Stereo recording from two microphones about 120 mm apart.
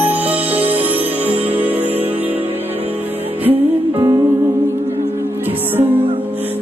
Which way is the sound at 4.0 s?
30° right (ahead or behind).